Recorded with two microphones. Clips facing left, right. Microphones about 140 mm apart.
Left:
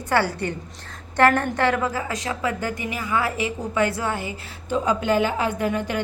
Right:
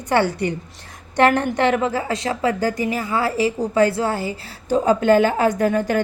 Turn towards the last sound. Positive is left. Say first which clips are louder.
# right 5 dB
turn(degrees=-45)  # may be behind; listen again after turning